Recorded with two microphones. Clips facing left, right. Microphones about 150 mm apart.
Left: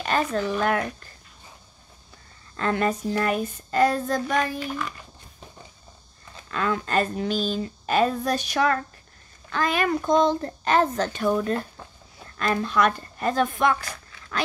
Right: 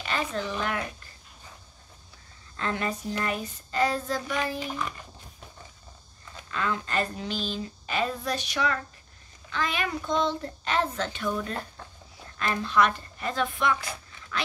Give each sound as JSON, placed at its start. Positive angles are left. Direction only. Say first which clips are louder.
{"t": 0.0, "sound": "speech", "louder": "left 6 dB", "side_deg": 45}
{"t": 2.5, "sound": "a woman's voice", "louder": "left 6 dB", "side_deg": 55}
{"t": 4.7, "sound": "speech", "louder": "left 2 dB", "side_deg": 0}
{"t": 6.5, "sound": "speech", "louder": "left 5 dB", "side_deg": 50}